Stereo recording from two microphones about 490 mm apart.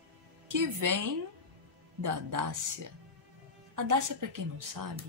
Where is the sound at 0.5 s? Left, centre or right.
Right.